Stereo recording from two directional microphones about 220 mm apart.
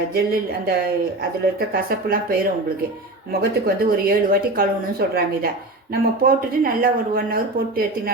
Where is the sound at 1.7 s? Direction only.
40° right (ahead or behind).